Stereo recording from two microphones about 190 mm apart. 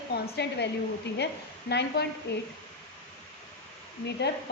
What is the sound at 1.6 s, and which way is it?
Speech, 60° left (ahead or behind).